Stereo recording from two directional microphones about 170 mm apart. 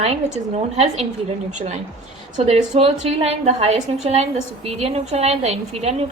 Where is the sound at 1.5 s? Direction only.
45° right (ahead or behind).